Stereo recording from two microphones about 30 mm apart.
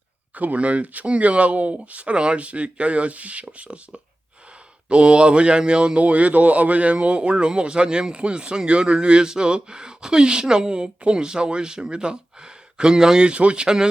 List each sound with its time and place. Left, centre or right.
0.3 s a man's voice: right
6.0 s a man's voice: right
13.3 s a man's voice: right